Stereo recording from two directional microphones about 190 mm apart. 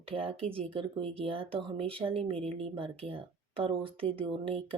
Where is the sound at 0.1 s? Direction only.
30° right (ahead or behind).